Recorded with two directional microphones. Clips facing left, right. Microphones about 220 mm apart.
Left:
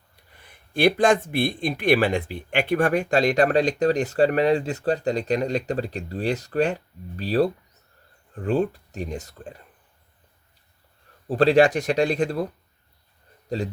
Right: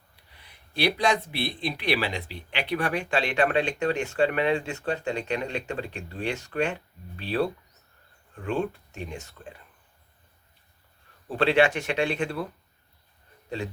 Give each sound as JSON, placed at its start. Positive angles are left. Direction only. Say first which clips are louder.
{"t": 0.3, "sound": "speech", "louder": "left 4 dB", "side_deg": 50}
{"t": 11.3, "sound": "speech", "louder": "left 5 dB", "side_deg": 40}
{"t": 13.5, "sound": "speech", "louder": "left 5 dB", "side_deg": 35}